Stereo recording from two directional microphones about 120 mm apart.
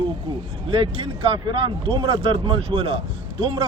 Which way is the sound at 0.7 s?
50° right (ahead or behind).